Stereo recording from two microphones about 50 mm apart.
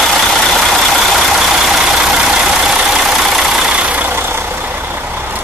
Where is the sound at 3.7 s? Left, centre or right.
Right.